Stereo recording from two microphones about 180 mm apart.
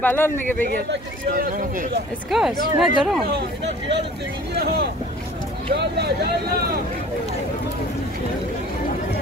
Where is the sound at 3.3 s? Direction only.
70° right (ahead or behind).